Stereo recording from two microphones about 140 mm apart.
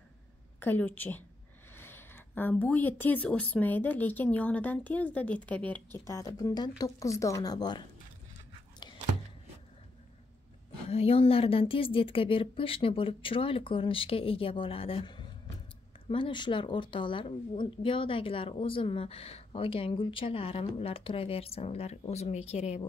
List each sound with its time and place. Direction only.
0.6 s speech: 15° left (ahead or behind)
6.0 s a woman's voice: 25° left (ahead or behind)
10.9 s a woman's voice: 45° left (ahead or behind)